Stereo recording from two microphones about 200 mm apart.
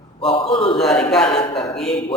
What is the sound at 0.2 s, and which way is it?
Speech, 25° left (ahead or behind).